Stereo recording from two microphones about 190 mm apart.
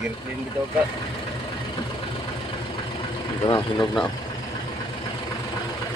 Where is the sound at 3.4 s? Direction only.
25° left (ahead or behind).